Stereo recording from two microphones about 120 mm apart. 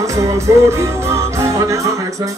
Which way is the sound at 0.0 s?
25° right (ahead or behind).